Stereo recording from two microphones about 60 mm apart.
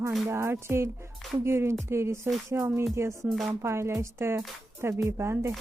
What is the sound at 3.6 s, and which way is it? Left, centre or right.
Speech, right.